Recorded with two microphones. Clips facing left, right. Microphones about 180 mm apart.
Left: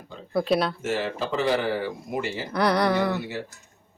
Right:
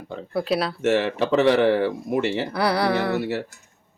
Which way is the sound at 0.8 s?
75° right (ahead or behind).